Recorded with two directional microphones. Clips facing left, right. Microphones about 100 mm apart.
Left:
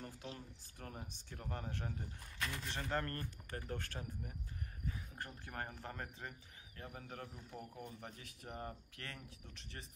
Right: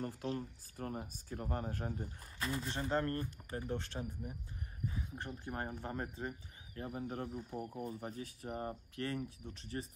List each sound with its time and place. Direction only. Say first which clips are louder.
0.0 s speech: right 10 dB; 45° right (ahead or behind)
0.9 s speech: right 7 dB; 35° right (ahead or behind)